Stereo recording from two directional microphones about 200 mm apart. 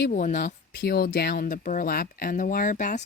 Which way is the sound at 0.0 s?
40° left (ahead or behind).